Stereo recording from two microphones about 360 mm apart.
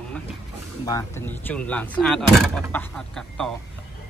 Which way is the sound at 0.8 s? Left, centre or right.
Centre.